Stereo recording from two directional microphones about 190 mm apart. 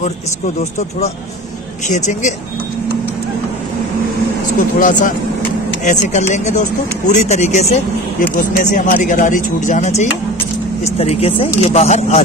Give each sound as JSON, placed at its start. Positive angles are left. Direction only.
{"t": 1.9, "sound": "speech", "side_deg": 40}
{"t": 4.6, "sound": "speech", "side_deg": 45}